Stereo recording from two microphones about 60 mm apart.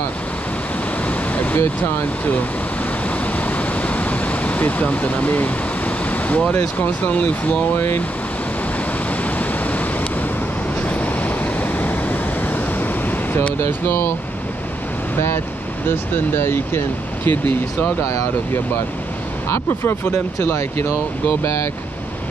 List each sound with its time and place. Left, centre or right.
1.0 s waves: left
3.3 s a sound: left
7.7 s speech: left
9.2 s waves: left
10.8 s vehicle: left
13.7 s speech: left
15.1 s speech: left
19.5 s speech: left